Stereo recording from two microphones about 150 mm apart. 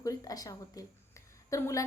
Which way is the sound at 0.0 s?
25° left (ahead or behind).